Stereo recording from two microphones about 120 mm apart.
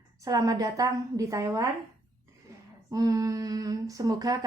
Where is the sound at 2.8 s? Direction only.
30° right (ahead or behind).